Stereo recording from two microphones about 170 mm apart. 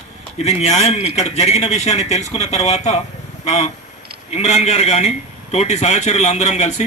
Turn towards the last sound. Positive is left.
turn(degrees=40)  # may be behind; listen again after turning